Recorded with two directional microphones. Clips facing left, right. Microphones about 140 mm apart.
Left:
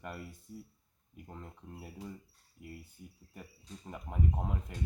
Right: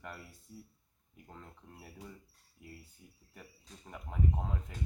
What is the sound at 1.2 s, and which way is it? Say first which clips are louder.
Speech: left 4 dB; 15° left (ahead or behind).